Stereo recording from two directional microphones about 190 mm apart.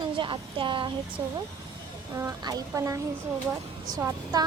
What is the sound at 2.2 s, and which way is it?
Speech, 20° right (ahead or behind).